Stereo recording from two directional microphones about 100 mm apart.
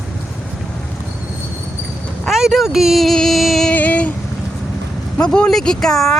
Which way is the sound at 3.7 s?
15° left (ahead or behind).